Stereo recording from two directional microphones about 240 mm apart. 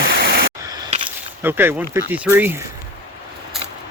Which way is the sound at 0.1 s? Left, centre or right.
Right.